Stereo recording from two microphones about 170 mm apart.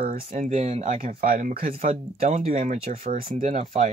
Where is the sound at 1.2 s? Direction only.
55° right (ahead or behind).